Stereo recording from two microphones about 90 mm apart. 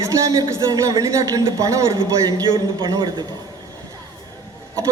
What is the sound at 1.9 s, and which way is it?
Speech, 50° right (ahead or behind).